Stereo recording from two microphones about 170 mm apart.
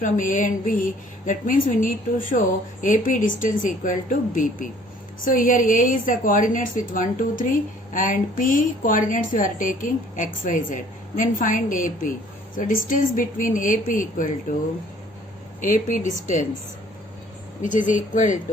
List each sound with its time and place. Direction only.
0.0 s a woman's voice: 50° left (ahead or behind)
17.6 s a woman's voice: 50° left (ahead or behind)